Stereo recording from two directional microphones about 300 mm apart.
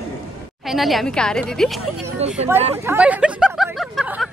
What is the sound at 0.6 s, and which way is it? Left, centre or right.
A woman's voice, centre.